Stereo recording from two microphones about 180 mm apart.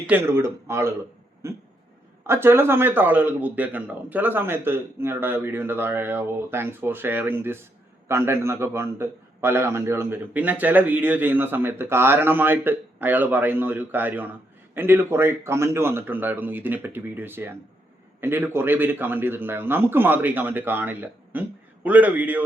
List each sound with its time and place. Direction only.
0.1 s a man's voice: 15° right (ahead or behind)